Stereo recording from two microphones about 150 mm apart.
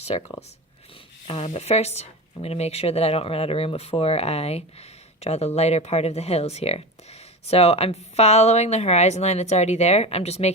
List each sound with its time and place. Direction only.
0.1 s speech: 40° left (ahead or behind)
1.3 s speech: 45° left (ahead or behind)